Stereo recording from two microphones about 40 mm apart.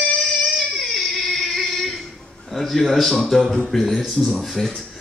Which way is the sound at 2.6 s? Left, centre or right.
Centre.